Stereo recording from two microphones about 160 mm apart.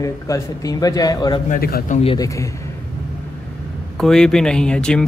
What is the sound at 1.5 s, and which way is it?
Speech, 70° left (ahead or behind).